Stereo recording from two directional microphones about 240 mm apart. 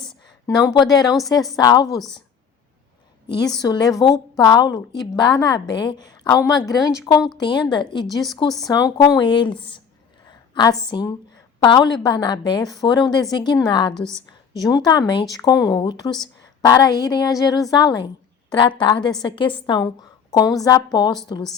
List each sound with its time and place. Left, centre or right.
0.3 s a woman's voice: centre
3.2 s a woman's voice: centre